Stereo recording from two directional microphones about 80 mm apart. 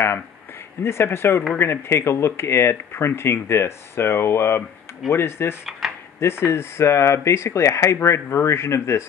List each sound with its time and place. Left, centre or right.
0.8 s speech: left
5.8 s a sound: centre
6.1 s speech: left